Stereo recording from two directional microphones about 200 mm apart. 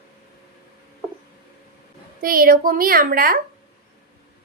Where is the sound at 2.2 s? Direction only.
45° right (ahead or behind).